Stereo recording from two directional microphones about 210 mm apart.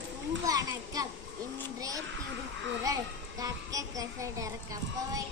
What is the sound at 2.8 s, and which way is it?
A child's voice, 15° right (ahead or behind).